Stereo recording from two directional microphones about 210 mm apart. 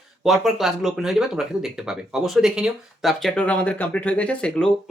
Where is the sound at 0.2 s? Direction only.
Centre (ahead or behind).